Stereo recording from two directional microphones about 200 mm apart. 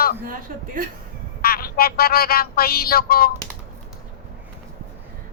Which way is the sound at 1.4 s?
50° left (ahead or behind).